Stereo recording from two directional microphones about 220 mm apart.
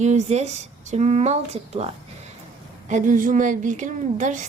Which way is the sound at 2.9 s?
35° right (ahead or behind).